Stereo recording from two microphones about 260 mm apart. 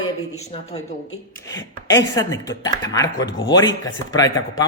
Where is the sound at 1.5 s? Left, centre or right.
Centre.